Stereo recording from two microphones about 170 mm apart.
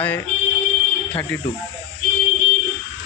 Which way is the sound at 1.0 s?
10° left (ahead or behind).